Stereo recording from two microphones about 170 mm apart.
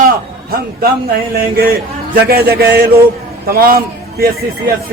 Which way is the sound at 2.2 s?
65° right (ahead or behind).